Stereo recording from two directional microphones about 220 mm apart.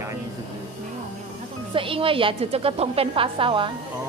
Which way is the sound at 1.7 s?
25° right (ahead or behind).